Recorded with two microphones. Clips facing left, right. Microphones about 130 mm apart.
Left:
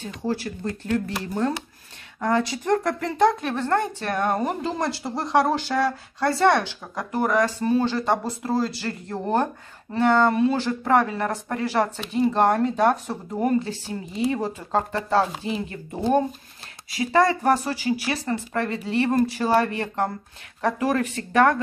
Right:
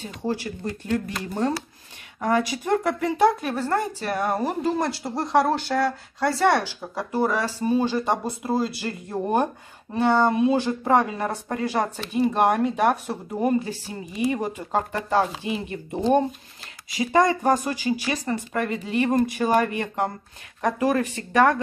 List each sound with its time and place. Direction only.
0.3 s a woman's voice: 15° right (ahead or behind)